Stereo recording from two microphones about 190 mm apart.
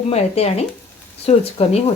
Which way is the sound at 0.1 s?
35° left (ahead or behind).